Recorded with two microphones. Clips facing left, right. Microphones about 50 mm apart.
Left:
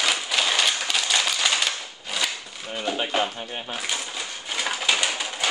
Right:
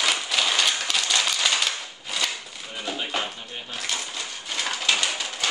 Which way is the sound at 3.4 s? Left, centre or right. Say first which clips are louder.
Left 5 dB; left.